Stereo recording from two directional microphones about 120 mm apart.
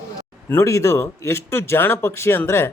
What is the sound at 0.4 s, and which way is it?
Speech, 20° left (ahead or behind).